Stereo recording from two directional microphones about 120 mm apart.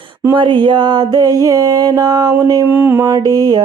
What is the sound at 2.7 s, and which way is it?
Mantra, 20° right (ahead or behind).